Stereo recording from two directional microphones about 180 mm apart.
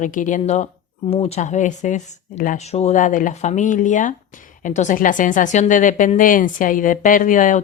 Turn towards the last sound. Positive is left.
turn(degrees=45)  # may be behind; listen again after turning